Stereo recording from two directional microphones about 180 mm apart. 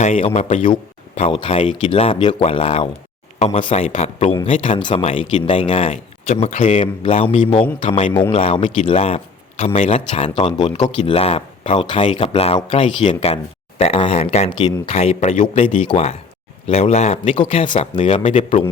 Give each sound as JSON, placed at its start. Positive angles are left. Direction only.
{"t": 0.0, "sound": "speech", "side_deg": 40}
{"t": 0.7, "sound": "a sound", "side_deg": 35}
{"t": 1.4, "sound": "speech", "side_deg": 35}